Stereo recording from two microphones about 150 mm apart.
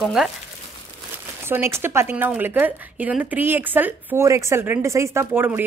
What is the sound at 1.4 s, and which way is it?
A woman's voice, 15° right (ahead or behind).